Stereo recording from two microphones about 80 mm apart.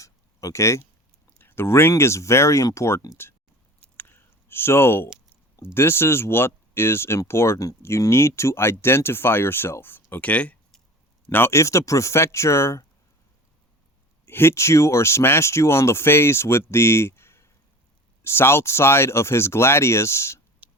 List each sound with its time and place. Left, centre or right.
0.0 s a sound: left
1.4 s speech: left
3.8 s a sound: left
5.7 s speech: left
11.3 s speech: left
14.3 s speech: left